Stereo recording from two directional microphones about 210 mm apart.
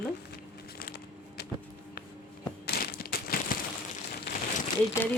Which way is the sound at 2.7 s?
50° left (ahead or behind).